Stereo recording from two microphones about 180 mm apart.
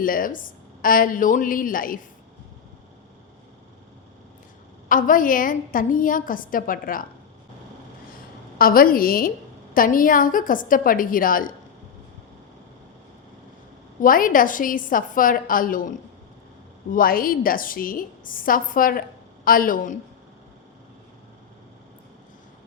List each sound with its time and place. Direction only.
0.0 s a woman's voice: 50° left (ahead or behind)
4.9 s a woman's voice: 50° left (ahead or behind)
8.5 s a woman's voice: 55° left (ahead or behind)
14.0 s a woman's voice: 50° left (ahead or behind)
16.9 s a woman's voice: 50° left (ahead or behind)